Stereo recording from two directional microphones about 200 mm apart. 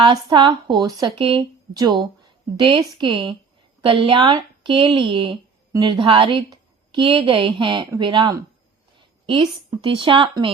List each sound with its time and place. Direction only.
0.1 s speech: 25° right (ahead or behind)